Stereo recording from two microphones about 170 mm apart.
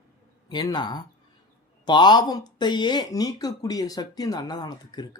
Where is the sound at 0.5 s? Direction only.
25° left (ahead or behind).